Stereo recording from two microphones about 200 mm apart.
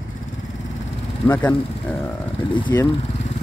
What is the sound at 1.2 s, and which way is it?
Speech, 10° left (ahead or behind).